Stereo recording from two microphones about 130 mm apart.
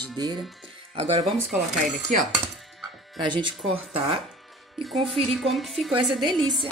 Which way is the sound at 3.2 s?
35° right (ahead or behind).